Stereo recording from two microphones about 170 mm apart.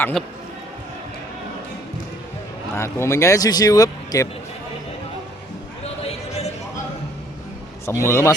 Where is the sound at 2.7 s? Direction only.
15° left (ahead or behind).